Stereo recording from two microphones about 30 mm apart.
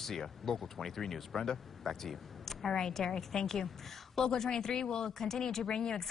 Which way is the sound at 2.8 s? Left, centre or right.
Centre.